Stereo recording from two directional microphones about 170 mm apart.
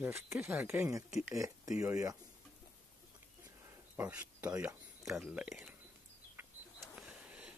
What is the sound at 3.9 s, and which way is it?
Speech, 10° right (ahead or behind).